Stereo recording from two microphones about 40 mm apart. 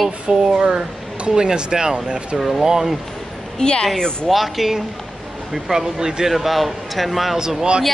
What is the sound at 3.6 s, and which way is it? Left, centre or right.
Speech, left.